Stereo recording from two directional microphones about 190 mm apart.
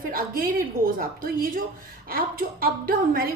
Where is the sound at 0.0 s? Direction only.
50° right (ahead or behind).